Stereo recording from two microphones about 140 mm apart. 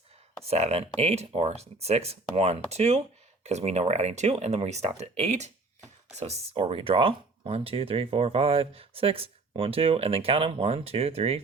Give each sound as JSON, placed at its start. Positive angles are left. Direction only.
{"t": 0.4, "sound": "speech", "side_deg": -50}